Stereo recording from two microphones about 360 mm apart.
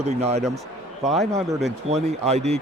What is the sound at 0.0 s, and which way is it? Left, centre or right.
Speech, centre.